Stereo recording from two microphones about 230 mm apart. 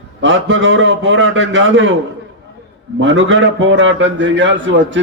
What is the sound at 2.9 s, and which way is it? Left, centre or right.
A man's voice, right.